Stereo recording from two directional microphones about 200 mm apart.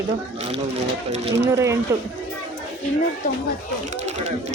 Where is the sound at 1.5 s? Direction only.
15° right (ahead or behind).